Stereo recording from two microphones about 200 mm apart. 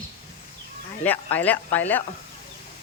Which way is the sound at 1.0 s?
10° left (ahead or behind).